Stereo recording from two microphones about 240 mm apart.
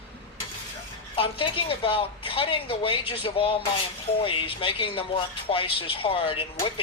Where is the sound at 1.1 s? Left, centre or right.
Left.